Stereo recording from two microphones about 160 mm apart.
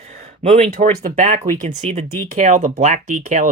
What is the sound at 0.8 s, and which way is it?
Speech, 55° right (ahead or behind).